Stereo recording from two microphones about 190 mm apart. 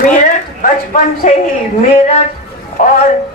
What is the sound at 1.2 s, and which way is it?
Speech, 40° left (ahead or behind).